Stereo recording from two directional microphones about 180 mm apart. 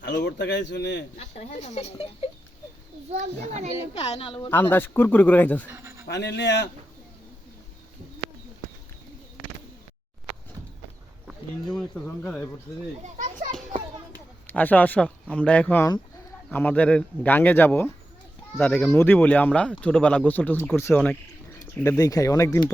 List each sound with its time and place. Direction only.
0.0 s a man's voice: 75° left (ahead or behind)
1.1 s speech: 40° left (ahead or behind)
3.9 s speech: 35° left (ahead or behind)
4.5 s speech: 10° left (ahead or behind)
5.6 s bird: 10° right (ahead or behind)
6.1 s a man's voice: 70° left (ahead or behind)
11.3 s speech: 5° left (ahead or behind)
13.0 s children playing: 45° right (ahead or behind)
14.4 s speech: 10° left (ahead or behind)
21.8 s speech: 20° left (ahead or behind)